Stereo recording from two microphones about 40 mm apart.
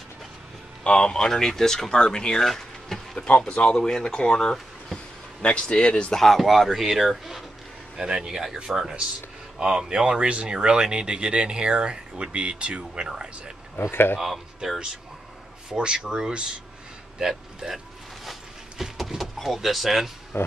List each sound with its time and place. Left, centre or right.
0.8 s speech: left
2.4 s a sound: centre
3.3 s speech: left
6.1 s speech: centre
7.9 s speech: centre
13.7 s speech: left
15.7 s speech: centre
17.6 s speech: centre
18.2 s a sound: centre
19.3 s speech: centre
20.3 s speech: left